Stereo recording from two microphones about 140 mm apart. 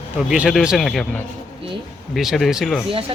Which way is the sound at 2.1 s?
Centre (ahead or behind).